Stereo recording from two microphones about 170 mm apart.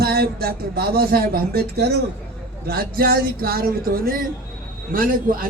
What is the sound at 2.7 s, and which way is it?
A man's voice, 60° right (ahead or behind).